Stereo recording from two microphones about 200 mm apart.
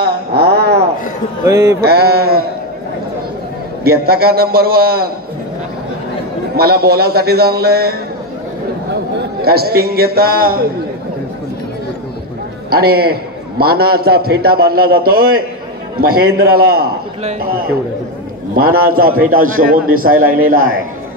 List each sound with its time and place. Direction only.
0.0 s a sound: 50° right (ahead or behind)
1.4 s speech: 15° right (ahead or behind)
1.8 s a man's voice: 50° right (ahead or behind)
3.8 s a man's voice: 50° right (ahead or behind)
6.5 s a man's voice: 50° right (ahead or behind)
9.2 s a man's voice: 50° right (ahead or behind)
12.6 s a man's voice: 50° right (ahead or behind)